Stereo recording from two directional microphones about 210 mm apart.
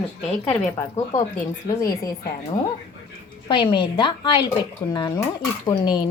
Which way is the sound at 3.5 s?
25° left (ahead or behind).